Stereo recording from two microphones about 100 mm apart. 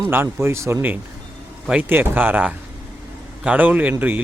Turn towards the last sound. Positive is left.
turn(degrees=-20)  # may be behind; listen again after turning